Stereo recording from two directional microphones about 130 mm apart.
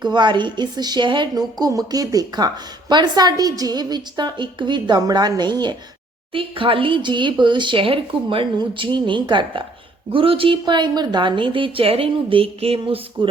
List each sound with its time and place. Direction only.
0.0 s a woman's voice: 35° right (ahead or behind)